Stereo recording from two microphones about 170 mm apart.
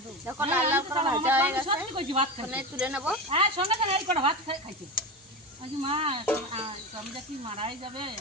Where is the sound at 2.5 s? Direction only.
10° right (ahead or behind).